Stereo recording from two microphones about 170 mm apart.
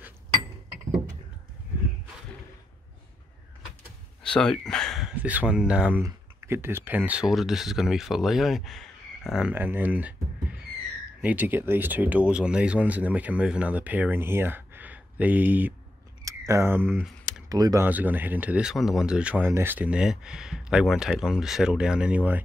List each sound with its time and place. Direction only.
4.2 s speech: 5° left (ahead or behind); by 17.0 s 15° right (ahead or behind)
17.0 s computer keyboard: 5° left (ahead or behind)
17.5 s speech: 20° right (ahead or behind)
17.8 s speech: 10° right (ahead or behind)